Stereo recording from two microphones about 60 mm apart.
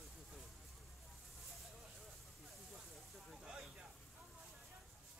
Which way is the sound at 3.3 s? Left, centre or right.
Centre.